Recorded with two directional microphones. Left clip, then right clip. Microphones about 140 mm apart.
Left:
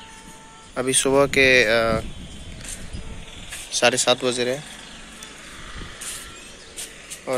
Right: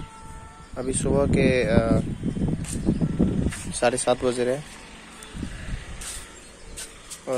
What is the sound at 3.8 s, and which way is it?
Speech, 15° right (ahead or behind).